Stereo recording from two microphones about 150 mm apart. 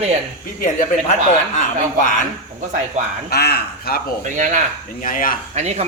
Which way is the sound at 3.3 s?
90° left.